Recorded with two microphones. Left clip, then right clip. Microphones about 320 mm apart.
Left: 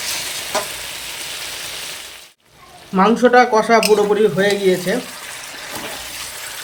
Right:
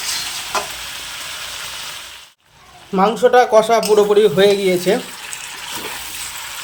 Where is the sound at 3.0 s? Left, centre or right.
Right.